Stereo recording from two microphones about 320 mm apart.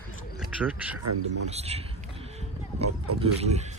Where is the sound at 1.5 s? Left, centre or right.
Centre.